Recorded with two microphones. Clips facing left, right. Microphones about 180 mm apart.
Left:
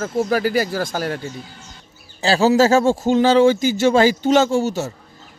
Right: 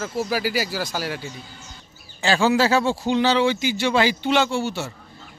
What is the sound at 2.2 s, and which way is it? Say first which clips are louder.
A man's voice: left 4 dB; 35° left (ahead or behind).